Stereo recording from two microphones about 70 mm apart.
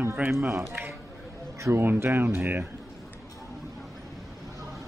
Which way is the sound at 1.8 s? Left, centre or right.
Right.